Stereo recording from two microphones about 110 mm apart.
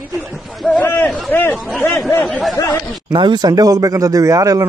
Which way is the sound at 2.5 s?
25° left (ahead or behind).